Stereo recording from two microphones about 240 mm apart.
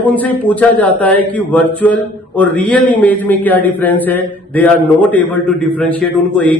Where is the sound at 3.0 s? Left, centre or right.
Centre.